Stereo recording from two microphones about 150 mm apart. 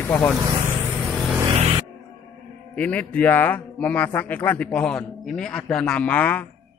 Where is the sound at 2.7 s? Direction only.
10° left (ahead or behind).